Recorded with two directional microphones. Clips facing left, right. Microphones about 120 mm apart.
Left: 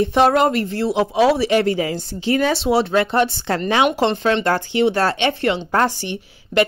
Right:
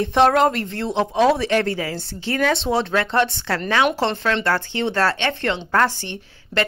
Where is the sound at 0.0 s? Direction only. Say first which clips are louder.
Left 1 dB; 5° left (ahead or behind).